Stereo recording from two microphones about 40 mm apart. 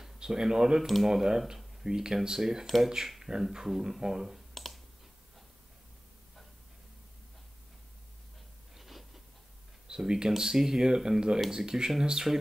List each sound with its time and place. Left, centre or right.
0.0 s speech: centre
8.7 s a sound: centre
9.8 s speech: centre